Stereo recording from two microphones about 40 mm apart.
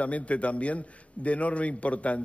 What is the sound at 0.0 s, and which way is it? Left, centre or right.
A man's voice, left.